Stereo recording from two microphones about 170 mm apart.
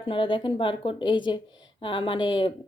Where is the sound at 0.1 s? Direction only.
30° left (ahead or behind).